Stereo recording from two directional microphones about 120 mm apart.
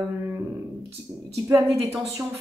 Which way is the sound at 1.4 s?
25° right (ahead or behind).